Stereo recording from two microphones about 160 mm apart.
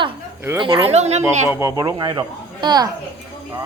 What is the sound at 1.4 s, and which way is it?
Speech, 15° right (ahead or behind).